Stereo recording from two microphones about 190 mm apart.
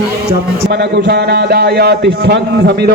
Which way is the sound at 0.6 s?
60° right (ahead or behind).